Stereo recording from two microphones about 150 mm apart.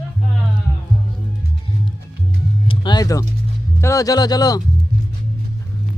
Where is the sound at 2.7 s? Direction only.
30° left (ahead or behind).